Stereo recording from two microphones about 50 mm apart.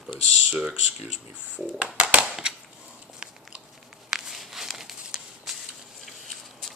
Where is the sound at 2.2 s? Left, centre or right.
Centre.